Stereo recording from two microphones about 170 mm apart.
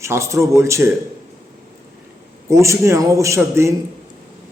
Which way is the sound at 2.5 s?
15° right (ahead or behind).